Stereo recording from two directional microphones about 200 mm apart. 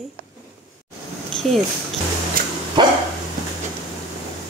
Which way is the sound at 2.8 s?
20° right (ahead or behind).